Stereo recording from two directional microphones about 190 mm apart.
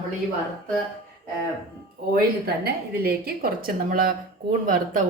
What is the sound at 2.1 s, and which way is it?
A woman's voice, 55° right (ahead or behind).